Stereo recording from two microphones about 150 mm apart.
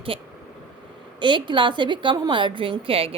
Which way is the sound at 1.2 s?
30° right (ahead or behind).